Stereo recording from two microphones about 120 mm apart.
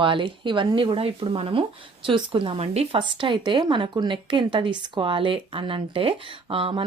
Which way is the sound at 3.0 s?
40° right (ahead or behind).